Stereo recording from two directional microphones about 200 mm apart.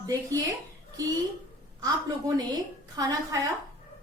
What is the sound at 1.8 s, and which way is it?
A woman's voice, 20° right (ahead or behind).